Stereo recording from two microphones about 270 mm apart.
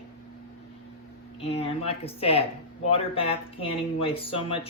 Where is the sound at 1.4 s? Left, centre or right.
Left.